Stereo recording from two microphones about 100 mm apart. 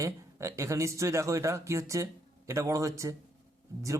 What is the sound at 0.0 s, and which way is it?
Speech, 30° right (ahead or behind).